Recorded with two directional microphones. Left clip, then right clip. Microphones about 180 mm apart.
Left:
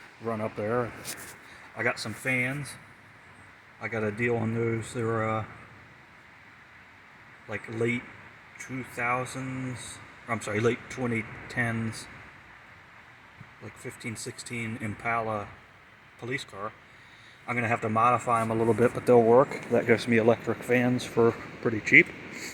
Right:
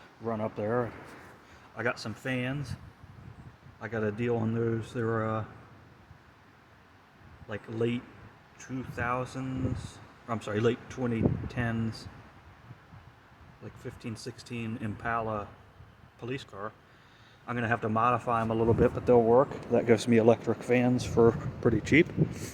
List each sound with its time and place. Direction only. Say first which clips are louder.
0.3 s a man's voice: left 1 dB; 5° right (ahead or behind)
3.8 s speech: left 3 dB; 5° left (ahead or behind)
7.4 s a man's voice: left 2 dB; 5° left (ahead or behind)
13.8 s a man's voice: left 3 dB; centre (ahead or behind)
19.7 s speech: even; 20° right (ahead or behind)
21.6 s speech: left 5 dB; 35° right (ahead or behind)